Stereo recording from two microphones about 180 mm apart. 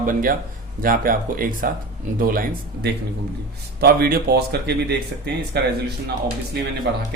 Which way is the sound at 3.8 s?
55° right (ahead or behind).